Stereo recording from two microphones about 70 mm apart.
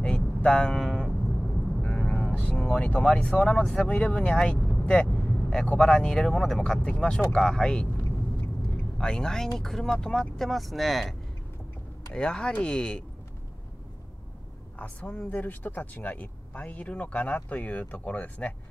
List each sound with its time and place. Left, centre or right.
0.0 s vehicle: centre
1.8 s music: centre
2.6 s speech: centre
4.6 s vehicle: centre
5.7 s speech: centre
8.6 s vehicle: centre
9.6 s speech: centre
12.1 s speech: centre
14.8 s speech: centre